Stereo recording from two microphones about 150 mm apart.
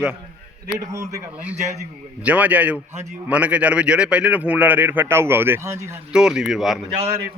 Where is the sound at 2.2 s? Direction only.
10° right (ahead or behind).